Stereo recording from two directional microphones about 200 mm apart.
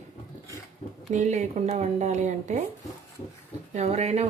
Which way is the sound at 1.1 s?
35° right (ahead or behind).